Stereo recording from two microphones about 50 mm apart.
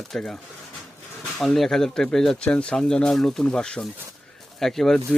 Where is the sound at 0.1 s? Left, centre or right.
Centre.